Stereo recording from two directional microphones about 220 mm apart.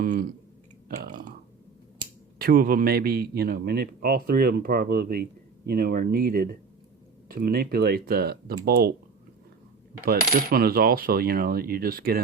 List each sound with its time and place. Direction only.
0.0 s speech: 40° right (ahead or behind)
0.9 s clicking: 40° right (ahead or behind)
2.4 s speech: 40° right (ahead or behind)
10.1 s speech: 40° right (ahead or behind)